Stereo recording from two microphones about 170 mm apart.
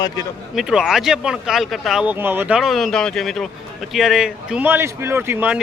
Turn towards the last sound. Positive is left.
turn(degrees=-10)  # may be behind; listen again after turning